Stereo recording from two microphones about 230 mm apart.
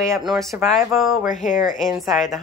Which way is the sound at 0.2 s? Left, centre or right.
Centre.